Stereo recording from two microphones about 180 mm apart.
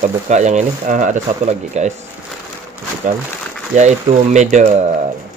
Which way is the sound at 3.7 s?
40° right (ahead or behind).